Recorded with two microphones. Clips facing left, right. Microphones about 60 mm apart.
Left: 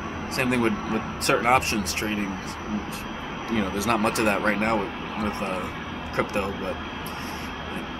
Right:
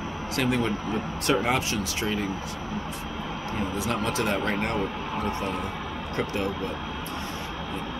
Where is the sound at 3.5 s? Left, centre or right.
Left.